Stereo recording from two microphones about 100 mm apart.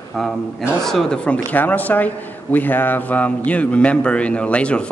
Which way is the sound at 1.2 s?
15° left (ahead or behind).